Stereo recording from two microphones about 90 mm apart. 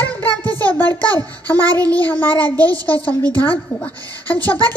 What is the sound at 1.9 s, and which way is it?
Child singing, 20° left (ahead or behind).